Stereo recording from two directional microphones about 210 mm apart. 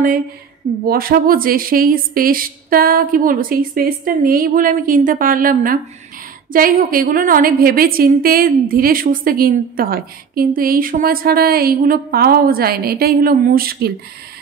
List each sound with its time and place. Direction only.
0.8 s a woman's voice: 45° right (ahead or behind)